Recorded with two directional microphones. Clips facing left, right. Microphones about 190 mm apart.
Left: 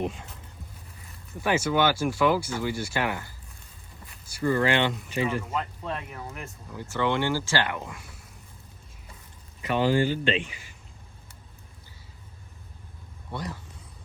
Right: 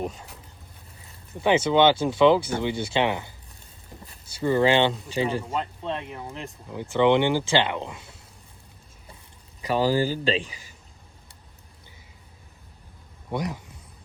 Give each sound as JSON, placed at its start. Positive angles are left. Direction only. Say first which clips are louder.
{"t": 1.5, "sound": "speech", "louder": "right 5 dB", "side_deg": -25}
{"t": 9.6, "sound": "speech", "louder": "right 1 dB", "side_deg": -35}
{"t": 13.3, "sound": "speech", "louder": "right 6 dB", "side_deg": -15}